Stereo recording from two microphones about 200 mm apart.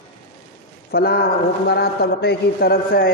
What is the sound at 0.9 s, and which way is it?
A man's voice, 50° left (ahead or behind).